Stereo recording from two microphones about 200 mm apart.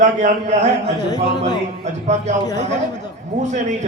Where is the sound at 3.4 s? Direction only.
35° right (ahead or behind).